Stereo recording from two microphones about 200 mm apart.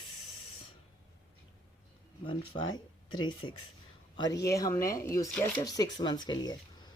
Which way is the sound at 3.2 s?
25° left (ahead or behind).